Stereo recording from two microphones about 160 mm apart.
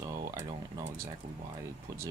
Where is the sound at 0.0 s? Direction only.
20° right (ahead or behind).